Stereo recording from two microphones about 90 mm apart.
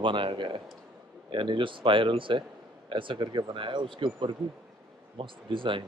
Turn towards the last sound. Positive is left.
turn(degrees=-70)  # may be behind; listen again after turning